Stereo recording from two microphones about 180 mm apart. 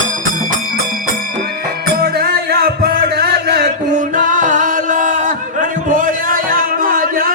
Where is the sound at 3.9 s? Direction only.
45° right (ahead or behind).